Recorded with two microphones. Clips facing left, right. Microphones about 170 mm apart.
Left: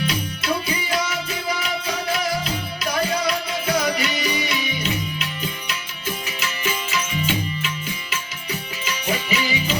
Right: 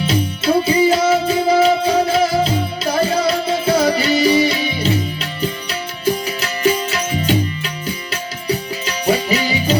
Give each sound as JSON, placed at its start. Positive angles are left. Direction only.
{"t": 0.1, "sound": "music", "side_deg": -30}